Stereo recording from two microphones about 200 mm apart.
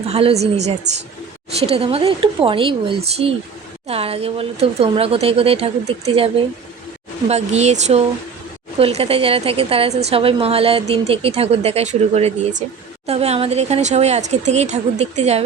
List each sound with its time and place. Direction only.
0.1 s a woman's voice: 30° right (ahead or behind)